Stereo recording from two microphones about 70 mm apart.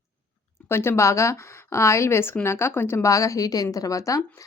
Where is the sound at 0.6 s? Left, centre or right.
Left.